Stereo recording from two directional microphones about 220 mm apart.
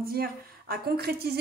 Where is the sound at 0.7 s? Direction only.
45° right (ahead or behind).